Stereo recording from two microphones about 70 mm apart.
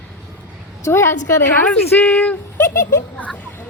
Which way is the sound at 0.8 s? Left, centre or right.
Left.